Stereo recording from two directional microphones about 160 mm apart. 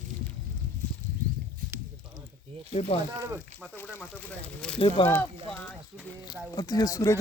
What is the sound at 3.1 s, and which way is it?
Speech, 20° right (ahead or behind).